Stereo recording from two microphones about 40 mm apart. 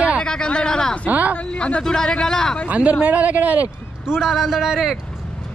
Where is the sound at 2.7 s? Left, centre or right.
Right.